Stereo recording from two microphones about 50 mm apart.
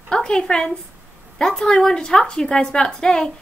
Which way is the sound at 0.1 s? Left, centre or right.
Centre.